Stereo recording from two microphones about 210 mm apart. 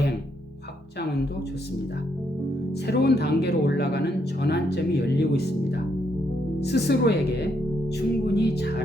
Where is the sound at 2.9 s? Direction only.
50° left (ahead or behind).